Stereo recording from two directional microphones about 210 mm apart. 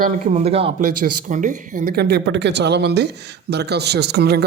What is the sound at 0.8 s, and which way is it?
Speech, 40° right (ahead or behind).